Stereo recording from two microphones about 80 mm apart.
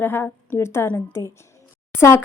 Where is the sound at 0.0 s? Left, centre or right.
Left.